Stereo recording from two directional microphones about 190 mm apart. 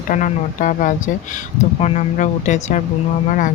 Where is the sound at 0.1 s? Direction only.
45° left (ahead or behind).